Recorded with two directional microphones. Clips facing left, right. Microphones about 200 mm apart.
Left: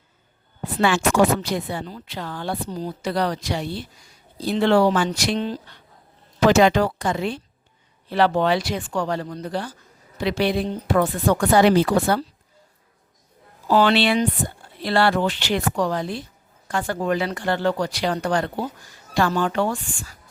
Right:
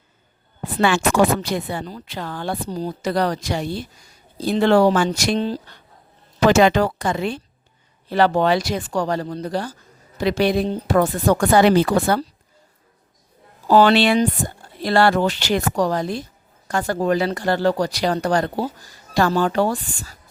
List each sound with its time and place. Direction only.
0.8 s speech: 60° right (ahead or behind)
1.8 s speech: 45° right (ahead or behind)
6.5 s speech: 60° right (ahead or behind)
8.0 s speech: 45° right (ahead or behind)
11.6 s speech: 60° right (ahead or behind)
13.7 s speech: 40° right (ahead or behind)